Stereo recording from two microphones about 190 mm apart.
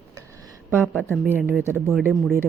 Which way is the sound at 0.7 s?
10° right (ahead or behind).